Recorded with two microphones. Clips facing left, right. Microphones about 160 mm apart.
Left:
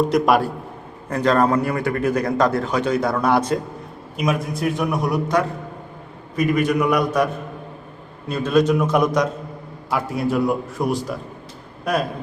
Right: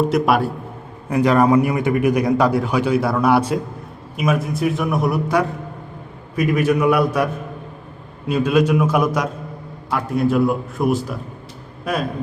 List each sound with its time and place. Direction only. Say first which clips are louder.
0.1 s a man's voice: even; centre (ahead or behind)
1.1 s a man's voice: right 3 dB; 10° right (ahead or behind)
8.3 s a man's voice: right 1 dB; 10° right (ahead or behind)